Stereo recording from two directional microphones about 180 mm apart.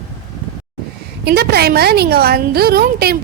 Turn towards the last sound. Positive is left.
turn(degrees=-60)  # may be behind; listen again after turning